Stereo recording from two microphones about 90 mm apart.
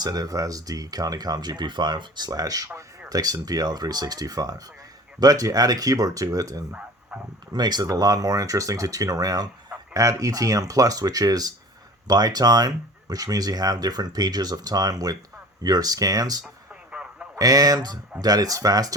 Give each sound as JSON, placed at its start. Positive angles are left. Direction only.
{"t": 0.0, "sound": "speech", "side_deg": -45}
{"t": 6.7, "sound": "bow-wow", "side_deg": -15}
{"t": 7.5, "sound": "speech", "side_deg": -50}
{"t": 16.9, "sound": "radio", "side_deg": -15}
{"t": 17.3, "sound": "speech", "side_deg": -40}